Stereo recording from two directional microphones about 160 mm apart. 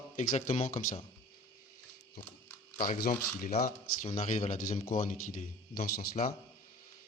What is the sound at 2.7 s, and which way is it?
A man's voice, 55° left (ahead or behind).